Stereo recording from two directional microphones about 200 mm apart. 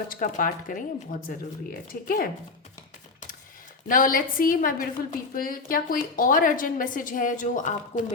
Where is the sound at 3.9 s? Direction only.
45° left (ahead or behind).